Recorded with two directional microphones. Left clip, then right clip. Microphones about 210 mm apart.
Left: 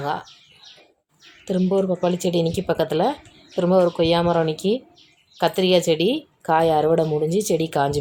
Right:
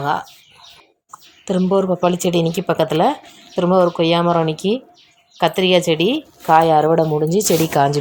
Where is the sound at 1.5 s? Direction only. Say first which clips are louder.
Right 4 dB; 10° right (ahead or behind).